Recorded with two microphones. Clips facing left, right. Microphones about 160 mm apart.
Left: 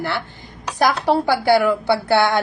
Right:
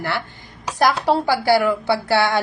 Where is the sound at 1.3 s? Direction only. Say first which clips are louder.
Left 2 dB; 20° left (ahead or behind).